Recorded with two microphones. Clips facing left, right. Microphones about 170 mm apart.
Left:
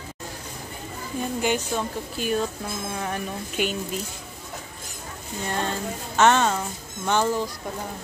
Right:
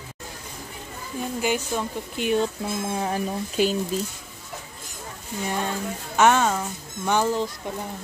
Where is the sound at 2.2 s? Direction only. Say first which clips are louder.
Right 3 dB; 20° right (ahead or behind).